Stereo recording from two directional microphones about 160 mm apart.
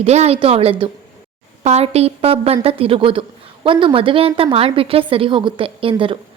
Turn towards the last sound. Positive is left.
turn(degrees=-35)  # may be behind; listen again after turning